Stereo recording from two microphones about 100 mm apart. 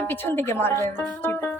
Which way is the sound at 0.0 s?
20° left (ahead or behind).